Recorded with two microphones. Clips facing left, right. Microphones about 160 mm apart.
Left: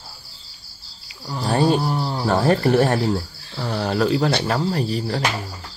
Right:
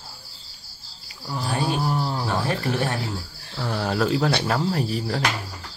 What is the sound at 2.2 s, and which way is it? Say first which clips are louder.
Speech: left 8 dB; 45° left (ahead or behind).